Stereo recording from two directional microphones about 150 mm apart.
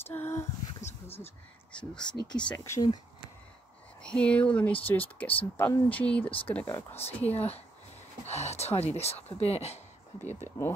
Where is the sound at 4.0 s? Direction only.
5° left (ahead or behind).